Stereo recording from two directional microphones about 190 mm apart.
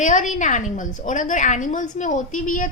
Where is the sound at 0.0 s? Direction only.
40° left (ahead or behind).